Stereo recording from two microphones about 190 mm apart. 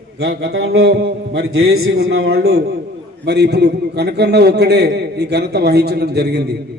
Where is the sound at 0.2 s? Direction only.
60° right (ahead or behind).